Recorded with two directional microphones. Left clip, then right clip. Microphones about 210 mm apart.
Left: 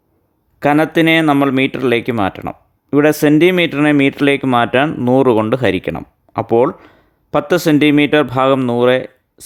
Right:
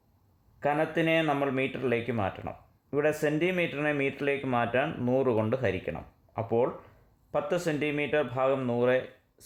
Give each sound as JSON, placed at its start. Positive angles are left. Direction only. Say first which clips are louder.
{"t": 0.6, "sound": "speech", "louder": "left 15 dB", "side_deg": 50}
{"t": 4.9, "sound": "speech", "louder": "left 15 dB", "side_deg": 35}